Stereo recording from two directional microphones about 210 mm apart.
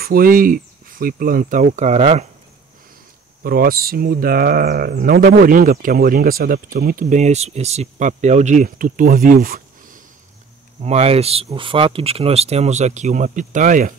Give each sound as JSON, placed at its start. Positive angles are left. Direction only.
{"t": 0.0, "sound": "speech", "side_deg": -45}
{"t": 3.4, "sound": "speech", "side_deg": -45}
{"t": 10.8, "sound": "speech", "side_deg": -30}